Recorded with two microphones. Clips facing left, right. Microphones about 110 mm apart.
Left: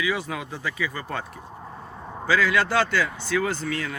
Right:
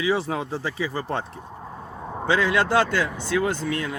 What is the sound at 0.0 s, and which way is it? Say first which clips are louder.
Speech: right 4 dB; 30° right (ahead or behind).